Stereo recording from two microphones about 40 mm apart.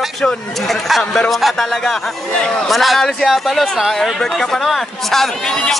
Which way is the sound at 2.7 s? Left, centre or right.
Centre.